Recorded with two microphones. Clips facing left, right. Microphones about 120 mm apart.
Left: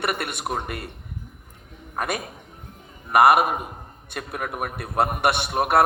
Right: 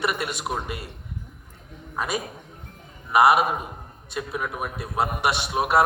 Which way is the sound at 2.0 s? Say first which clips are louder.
Even; 55° left (ahead or behind).